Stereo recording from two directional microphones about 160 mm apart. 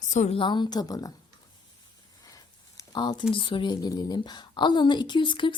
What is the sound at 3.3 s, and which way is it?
A woman's voice, 30° left (ahead or behind).